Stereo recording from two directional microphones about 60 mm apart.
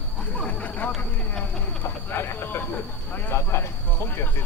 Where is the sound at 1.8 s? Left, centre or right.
Left.